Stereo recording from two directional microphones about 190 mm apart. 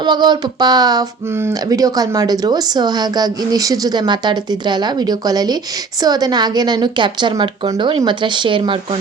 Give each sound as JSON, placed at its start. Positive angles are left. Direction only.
{"t": 0.0, "sound": "speech", "side_deg": -25}